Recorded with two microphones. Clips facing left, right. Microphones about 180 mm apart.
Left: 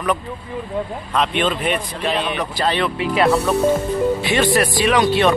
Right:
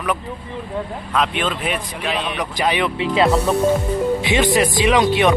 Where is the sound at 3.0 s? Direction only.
25° right (ahead or behind).